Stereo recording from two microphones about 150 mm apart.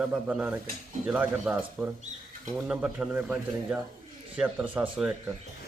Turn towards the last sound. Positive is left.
turn(degrees=-5)  # may be behind; listen again after turning